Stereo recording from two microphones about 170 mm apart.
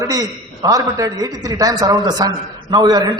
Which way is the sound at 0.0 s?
20° right (ahead or behind).